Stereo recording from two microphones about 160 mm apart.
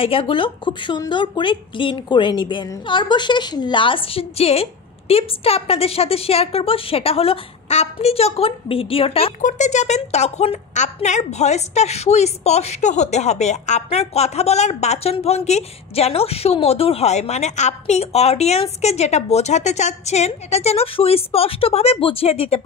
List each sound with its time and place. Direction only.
0.0 s a woman's voice: 35° left (ahead or behind)
9.4 s a woman's voice: 50° left (ahead or behind)